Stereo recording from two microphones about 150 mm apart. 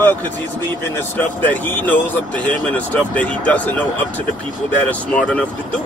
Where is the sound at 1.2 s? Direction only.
10° left (ahead or behind).